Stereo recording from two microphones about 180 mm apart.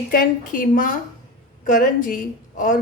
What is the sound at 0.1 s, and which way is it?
A woman's voice, 55° left (ahead or behind).